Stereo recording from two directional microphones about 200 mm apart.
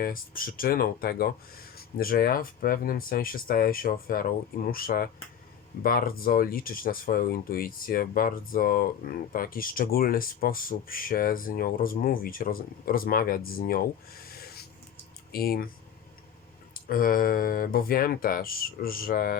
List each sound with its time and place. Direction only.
0.0 s speech: 45° left (ahead or behind)
16.7 s speech: 45° left (ahead or behind)